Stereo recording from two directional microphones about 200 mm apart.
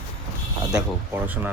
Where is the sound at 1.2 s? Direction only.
10° right (ahead or behind).